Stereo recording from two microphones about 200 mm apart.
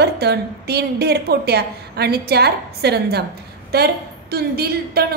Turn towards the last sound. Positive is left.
turn(degrees=-50)  # may be behind; listen again after turning